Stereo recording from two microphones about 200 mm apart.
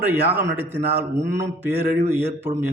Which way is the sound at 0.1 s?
10° right (ahead or behind).